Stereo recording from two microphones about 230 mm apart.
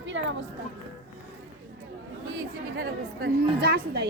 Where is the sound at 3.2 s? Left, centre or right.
Right.